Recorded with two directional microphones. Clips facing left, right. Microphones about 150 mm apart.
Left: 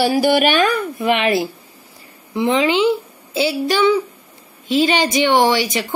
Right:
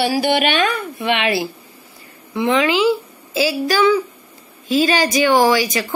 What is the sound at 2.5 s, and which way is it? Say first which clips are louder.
A woman's voice: even; 25° left (ahead or behind).